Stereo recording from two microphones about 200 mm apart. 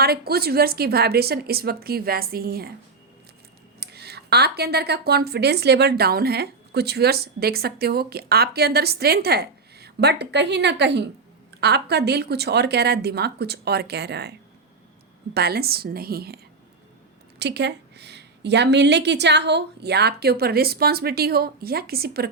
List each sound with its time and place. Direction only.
0.0 s speech: 50° right (ahead or behind)
3.8 s speech: 55° right (ahead or behind)
17.4 s speech: 55° right (ahead or behind)